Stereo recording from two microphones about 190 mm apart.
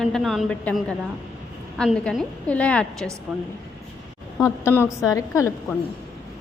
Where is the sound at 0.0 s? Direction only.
Centre (ahead or behind).